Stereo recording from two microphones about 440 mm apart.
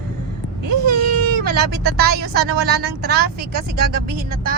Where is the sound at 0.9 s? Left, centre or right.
Right.